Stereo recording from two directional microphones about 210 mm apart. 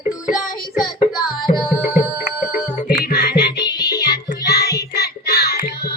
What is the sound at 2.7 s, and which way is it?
Music, 45° left (ahead or behind).